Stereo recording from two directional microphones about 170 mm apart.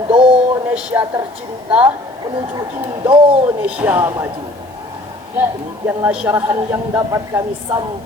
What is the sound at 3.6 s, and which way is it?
Speech, 10° right (ahead or behind).